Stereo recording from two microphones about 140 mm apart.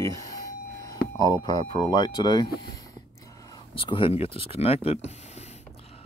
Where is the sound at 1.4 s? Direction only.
30° left (ahead or behind).